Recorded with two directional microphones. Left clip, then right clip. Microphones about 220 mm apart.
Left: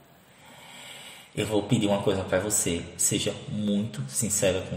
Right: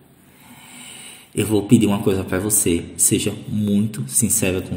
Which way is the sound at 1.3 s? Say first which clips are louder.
Right 9 dB; 50° right (ahead or behind).